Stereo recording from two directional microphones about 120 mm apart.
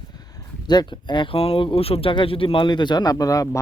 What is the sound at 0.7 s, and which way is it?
Speech, 40° left (ahead or behind).